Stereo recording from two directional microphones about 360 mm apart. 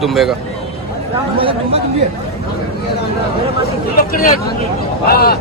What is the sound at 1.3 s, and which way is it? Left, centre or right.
Speech, centre.